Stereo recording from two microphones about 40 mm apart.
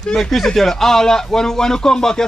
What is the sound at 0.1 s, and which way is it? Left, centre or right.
Speech, centre.